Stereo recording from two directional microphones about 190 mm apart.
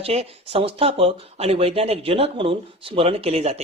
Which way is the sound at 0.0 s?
30° right (ahead or behind).